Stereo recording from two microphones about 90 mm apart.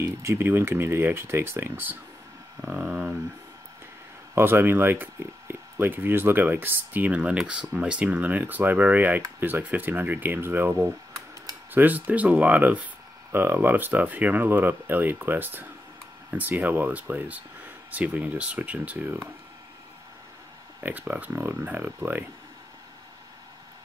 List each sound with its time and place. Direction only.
0.0 s speech: 30° right (ahead or behind)
2.6 s speech: 15° right (ahead or behind)
4.4 s speech: 25° right (ahead or behind)
20.8 s speech: 20° right (ahead or behind)